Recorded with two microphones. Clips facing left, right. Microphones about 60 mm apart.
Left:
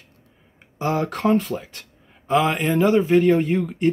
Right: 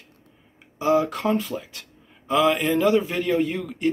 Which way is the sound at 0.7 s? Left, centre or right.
Left.